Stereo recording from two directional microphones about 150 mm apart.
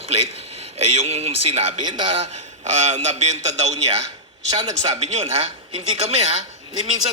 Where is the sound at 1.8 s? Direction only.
30° right (ahead or behind).